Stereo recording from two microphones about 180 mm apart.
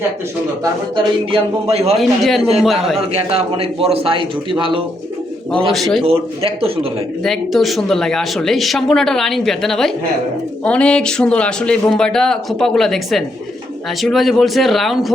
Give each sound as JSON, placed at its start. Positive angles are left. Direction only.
{"t": 0.6, "sound": "a man's voice", "side_deg": -30}
{"t": 2.0, "sound": "speech", "side_deg": 0}
{"t": 3.1, "sound": "a man's voice", "side_deg": -30}
{"t": 5.7, "sound": "speech", "side_deg": 0}
{"t": 6.1, "sound": "a man's voice", "side_deg": -30}
{"t": 7.3, "sound": "speech", "side_deg": 0}